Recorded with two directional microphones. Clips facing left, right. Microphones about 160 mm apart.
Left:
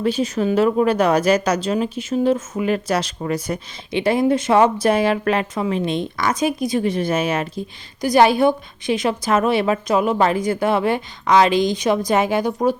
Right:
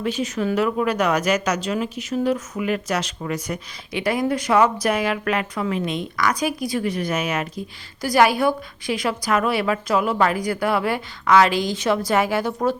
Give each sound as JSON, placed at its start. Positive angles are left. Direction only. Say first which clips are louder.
{"t": 0.0, "sound": "speech", "louder": "left 4 dB", "side_deg": 30}